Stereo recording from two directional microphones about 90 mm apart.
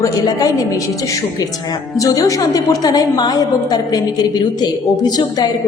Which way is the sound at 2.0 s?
40° left (ahead or behind).